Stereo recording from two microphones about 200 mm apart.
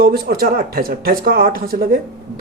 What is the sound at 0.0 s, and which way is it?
Speech, 50° right (ahead or behind).